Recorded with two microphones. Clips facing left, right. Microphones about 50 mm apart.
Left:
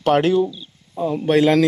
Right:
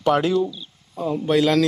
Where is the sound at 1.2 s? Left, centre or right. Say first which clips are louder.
Left 3 dB; left.